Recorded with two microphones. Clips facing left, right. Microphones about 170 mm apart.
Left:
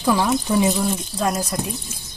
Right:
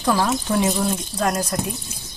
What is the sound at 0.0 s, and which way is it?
Speech, centre (ahead or behind).